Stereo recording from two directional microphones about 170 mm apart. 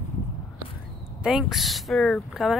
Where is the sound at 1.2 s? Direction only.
5° right (ahead or behind).